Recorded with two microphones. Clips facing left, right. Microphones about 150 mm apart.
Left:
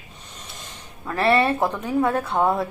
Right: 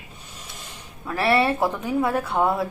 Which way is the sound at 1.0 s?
5° right (ahead or behind).